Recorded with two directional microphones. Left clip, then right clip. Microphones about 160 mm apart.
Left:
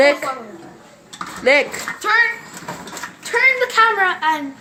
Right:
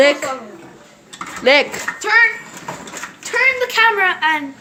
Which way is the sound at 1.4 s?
20° right (ahead or behind).